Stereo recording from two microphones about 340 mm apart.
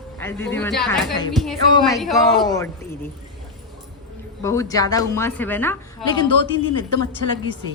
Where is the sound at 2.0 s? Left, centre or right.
Centre.